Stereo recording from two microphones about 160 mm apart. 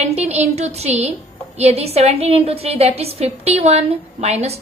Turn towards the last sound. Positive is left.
turn(degrees=-40)  # may be behind; listen again after turning